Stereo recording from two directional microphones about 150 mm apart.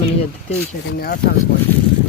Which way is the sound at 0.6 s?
90° left.